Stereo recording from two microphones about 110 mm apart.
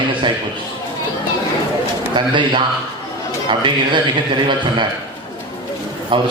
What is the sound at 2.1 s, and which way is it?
A man's voice, 45° right (ahead or behind).